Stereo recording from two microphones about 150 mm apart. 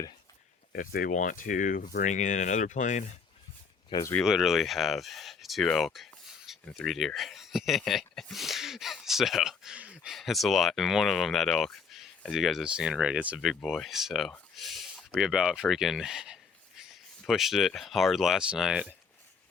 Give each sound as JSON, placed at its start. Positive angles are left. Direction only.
{"t": 0.7, "sound": "speech", "side_deg": 75}
{"t": 4.2, "sound": "speech", "side_deg": 0}